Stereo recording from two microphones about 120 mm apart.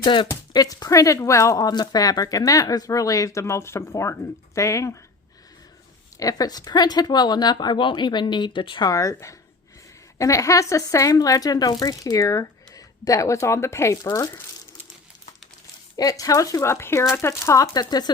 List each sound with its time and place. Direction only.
0.0 s speech: 40° left (ahead or behind)
0.5 s speech: 30° left (ahead or behind)
6.1 s speech: 30° left (ahead or behind)
8.9 s speech: 25° left (ahead or behind)
16.0 s speech: 30° left (ahead or behind)